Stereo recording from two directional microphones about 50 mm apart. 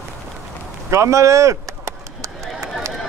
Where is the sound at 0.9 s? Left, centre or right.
Right.